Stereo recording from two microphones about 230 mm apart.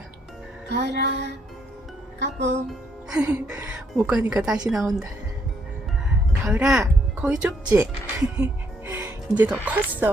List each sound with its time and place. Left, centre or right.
0.7 s music: right
2.1 s speech: right
2.6 s speech: centre
6.4 s speech: centre
8.9 s music: centre
9.6 s speech: centre